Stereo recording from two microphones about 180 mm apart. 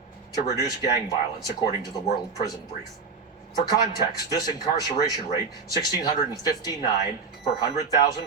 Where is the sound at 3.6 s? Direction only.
20° left (ahead or behind).